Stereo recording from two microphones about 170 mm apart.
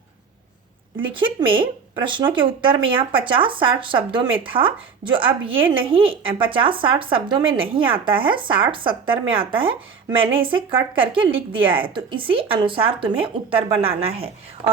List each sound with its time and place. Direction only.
1.0 s speech: 30° right (ahead or behind)